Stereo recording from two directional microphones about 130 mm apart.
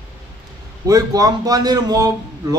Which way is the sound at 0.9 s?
25° right (ahead or behind).